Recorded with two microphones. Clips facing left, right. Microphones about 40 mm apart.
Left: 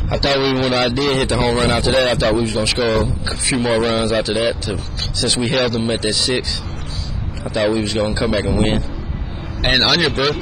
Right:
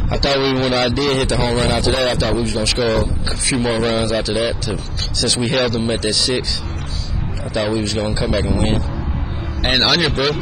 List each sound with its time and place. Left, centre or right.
0.3 s a man's voice: centre
2.0 s a man's voice: left
2.4 s a man's voice: centre
2.8 s a man's voice: centre
4.0 s a man's voice: centre
7.5 s a man's voice: centre
9.7 s a man's voice: centre